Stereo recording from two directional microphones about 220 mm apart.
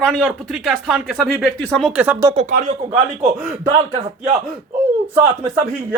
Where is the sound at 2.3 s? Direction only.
30° right (ahead or behind).